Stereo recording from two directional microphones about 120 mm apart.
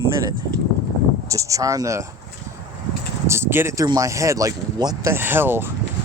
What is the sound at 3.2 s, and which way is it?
Speech, 20° right (ahead or behind).